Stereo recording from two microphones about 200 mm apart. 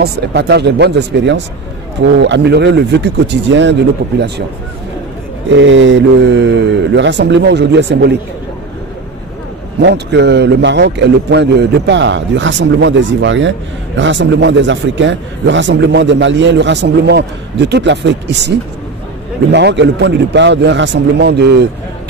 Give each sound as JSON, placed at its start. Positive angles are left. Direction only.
{"t": 0.0, "sound": "a man's voice", "side_deg": -55}
{"t": 5.5, "sound": "a man's voice", "side_deg": -65}
{"t": 9.8, "sound": "a man's voice", "side_deg": -60}
{"t": 19.5, "sound": "a man's voice", "side_deg": -60}